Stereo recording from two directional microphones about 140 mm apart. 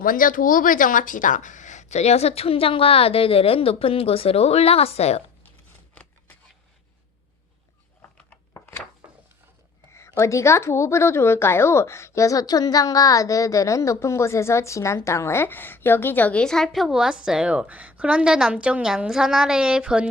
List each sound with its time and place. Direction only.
0.0 s speech: 85° left; by 5.2 s 50° left (ahead or behind)
5.9 s scissors: 10° left (ahead or behind)
10.2 s a woman's voice: 20° left (ahead or behind); by 20.1 s 5° right (ahead or behind)